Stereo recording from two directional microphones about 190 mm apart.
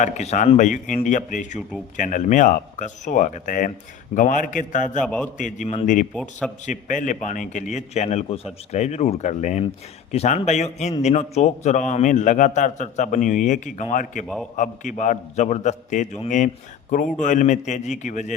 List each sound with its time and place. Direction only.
0.0 s a man's voice: 40° left (ahead or behind)
4.9 s a man's voice: 5° left (ahead or behind)
5.4 s a man's voice: 40° left (ahead or behind)